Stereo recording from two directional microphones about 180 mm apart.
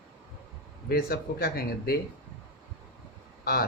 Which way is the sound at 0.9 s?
55° left (ahead or behind).